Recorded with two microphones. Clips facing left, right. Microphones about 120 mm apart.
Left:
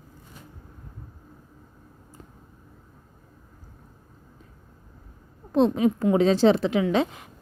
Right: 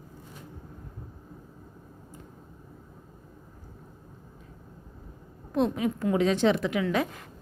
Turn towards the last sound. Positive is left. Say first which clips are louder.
# left 4 dB
turn(degrees=20)  # may be behind; listen again after turning